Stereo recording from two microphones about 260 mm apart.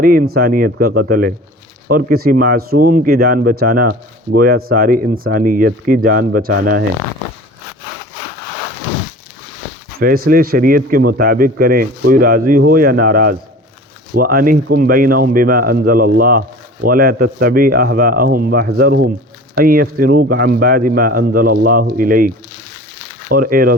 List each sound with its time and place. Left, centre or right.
0.0 s speech: right
10.2 s speech: right
23.3 s speech: right